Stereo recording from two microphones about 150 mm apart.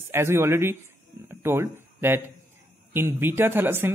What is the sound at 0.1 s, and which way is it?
Speech, 15° right (ahead or behind).